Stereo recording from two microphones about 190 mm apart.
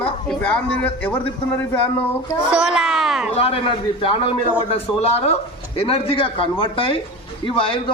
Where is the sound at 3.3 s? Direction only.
30° left (ahead or behind).